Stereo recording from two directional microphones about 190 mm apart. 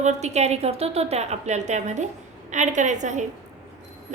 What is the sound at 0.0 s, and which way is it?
A woman's voice, 35° right (ahead or behind).